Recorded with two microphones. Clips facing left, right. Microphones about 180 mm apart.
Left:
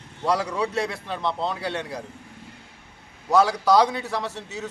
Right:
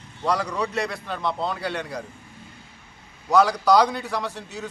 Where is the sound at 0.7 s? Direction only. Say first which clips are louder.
Left 1 dB; 25° left (ahead or behind).